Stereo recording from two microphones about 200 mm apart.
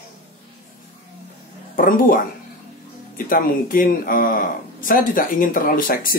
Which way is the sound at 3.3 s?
45° left (ahead or behind).